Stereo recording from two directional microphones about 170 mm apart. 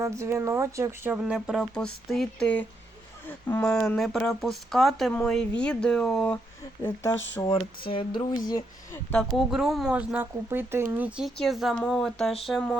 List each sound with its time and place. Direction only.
0.0 s speech: 15° right (ahead or behind); by 7.5 s 15° left (ahead or behind)
7.9 s a sound: 30° left (ahead or behind)
9.1 s speech: centre (ahead or behind)